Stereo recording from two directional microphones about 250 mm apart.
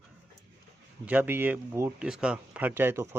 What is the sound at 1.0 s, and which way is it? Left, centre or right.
Speech, centre.